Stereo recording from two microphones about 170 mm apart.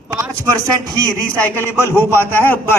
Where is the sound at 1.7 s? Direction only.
15° left (ahead or behind).